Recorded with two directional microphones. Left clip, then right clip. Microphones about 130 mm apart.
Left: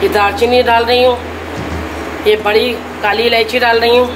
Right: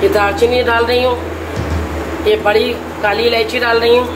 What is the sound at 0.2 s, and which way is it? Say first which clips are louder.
Speech: left 2 dB; 90° left.